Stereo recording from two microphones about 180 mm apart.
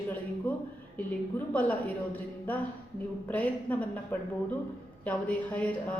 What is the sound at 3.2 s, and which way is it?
Speech, 10° left (ahead or behind).